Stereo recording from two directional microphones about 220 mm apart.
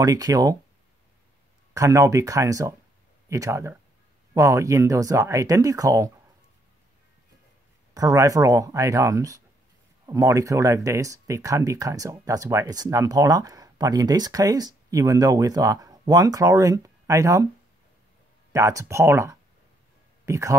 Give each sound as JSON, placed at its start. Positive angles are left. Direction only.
{"t": 0.0, "sound": "speech", "side_deg": -15}
{"t": 1.7, "sound": "speech", "side_deg": -15}
{"t": 7.9, "sound": "speech", "side_deg": -15}
{"t": 18.5, "sound": "speech", "side_deg": -15}